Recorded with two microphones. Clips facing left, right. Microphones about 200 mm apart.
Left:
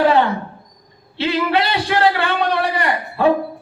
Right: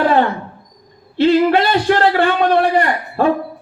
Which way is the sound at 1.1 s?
50° right (ahead or behind).